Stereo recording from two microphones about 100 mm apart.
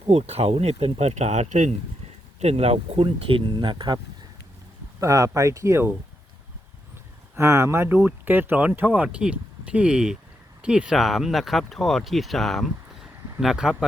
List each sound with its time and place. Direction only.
0.1 s speech: 90° right
2.4 s speech: 90° right; by 4.0 s 50° right (ahead or behind)
4.9 s speech: 35° right (ahead or behind)
7.3 s speech: 30° right (ahead or behind); by 13.8 s 5° right (ahead or behind)